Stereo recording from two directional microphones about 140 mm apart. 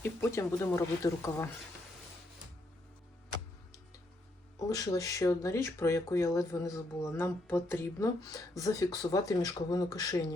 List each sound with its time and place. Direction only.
0.0 s speech: 20° left (ahead or behind)
4.5 s speech: 25° left (ahead or behind)